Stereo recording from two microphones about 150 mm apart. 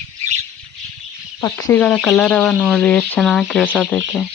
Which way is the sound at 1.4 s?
15° left (ahead or behind).